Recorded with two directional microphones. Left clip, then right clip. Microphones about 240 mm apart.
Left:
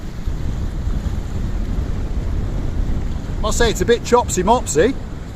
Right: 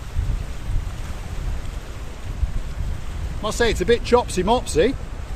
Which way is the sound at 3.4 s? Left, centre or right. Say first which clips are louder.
Left 3 dB; left.